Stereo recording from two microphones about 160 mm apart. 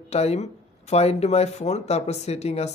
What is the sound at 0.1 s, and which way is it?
Speech, 40° left (ahead or behind).